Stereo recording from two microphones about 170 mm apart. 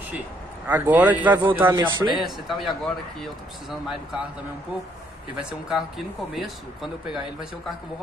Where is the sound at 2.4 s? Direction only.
Centre (ahead or behind).